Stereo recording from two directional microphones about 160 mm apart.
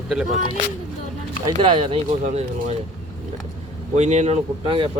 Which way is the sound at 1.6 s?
35° right (ahead or behind).